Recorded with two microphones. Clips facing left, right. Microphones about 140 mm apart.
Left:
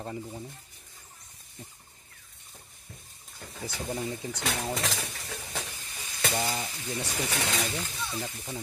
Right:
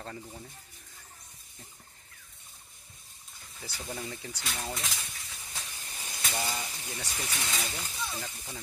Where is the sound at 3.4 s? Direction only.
70° left (ahead or behind).